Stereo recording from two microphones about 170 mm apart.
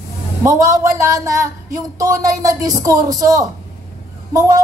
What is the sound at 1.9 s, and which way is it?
Speech, 20° right (ahead or behind).